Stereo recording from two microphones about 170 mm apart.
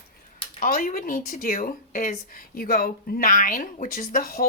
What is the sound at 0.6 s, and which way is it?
A woman's voice, 55° left (ahead or behind).